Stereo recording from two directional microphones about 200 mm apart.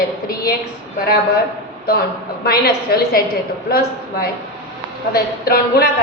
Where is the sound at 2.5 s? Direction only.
50° left (ahead or behind).